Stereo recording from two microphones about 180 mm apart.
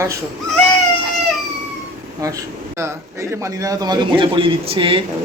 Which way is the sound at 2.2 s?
15° right (ahead or behind).